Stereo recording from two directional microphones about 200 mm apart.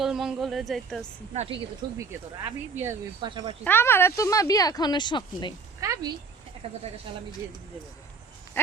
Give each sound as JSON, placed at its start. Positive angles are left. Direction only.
{"t": 0.0, "sound": "speech", "side_deg": 0}
{"t": 1.3, "sound": "a woman's voice", "side_deg": -30}
{"t": 2.0, "sound": "speech", "side_deg": -10}
{"t": 3.2, "sound": "a woman's voice", "side_deg": -25}
{"t": 3.6, "sound": "speech", "side_deg": 10}
{"t": 5.8, "sound": "speech", "side_deg": -20}
{"t": 6.6, "sound": "a woman's voice", "side_deg": -30}